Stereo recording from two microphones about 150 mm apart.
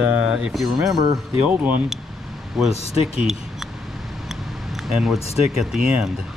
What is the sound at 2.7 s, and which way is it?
Speech, 45° left (ahead or behind).